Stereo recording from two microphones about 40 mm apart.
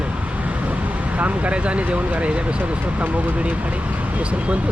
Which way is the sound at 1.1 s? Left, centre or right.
Right.